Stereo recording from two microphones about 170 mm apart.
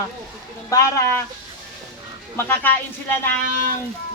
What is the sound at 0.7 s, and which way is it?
Speech, 15° left (ahead or behind).